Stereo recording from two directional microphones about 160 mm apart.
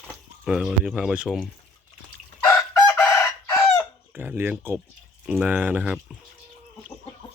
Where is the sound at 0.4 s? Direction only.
5° right (ahead or behind).